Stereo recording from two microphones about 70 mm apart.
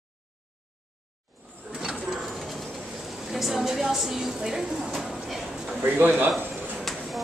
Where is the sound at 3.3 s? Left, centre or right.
Centre.